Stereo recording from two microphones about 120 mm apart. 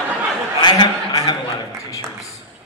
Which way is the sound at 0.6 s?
40° left (ahead or behind).